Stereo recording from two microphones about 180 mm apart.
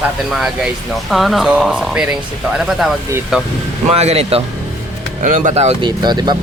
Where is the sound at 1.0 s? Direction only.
Centre (ahead or behind).